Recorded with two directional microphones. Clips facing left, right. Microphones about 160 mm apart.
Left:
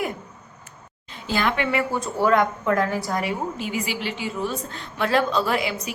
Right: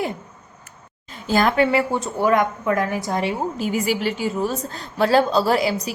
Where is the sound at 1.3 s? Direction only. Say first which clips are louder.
Right 6 dB; 40° right (ahead or behind); by 3.3 s 25° right (ahead or behind).